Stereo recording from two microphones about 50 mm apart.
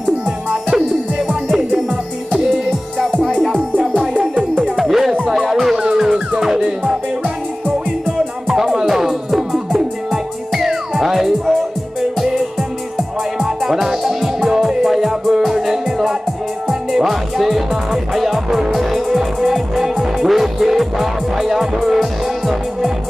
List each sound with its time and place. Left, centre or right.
0.5 s music: centre
3.0 s music: centre
4.1 s music: centre
8.5 s music: centre
13.4 s music: centre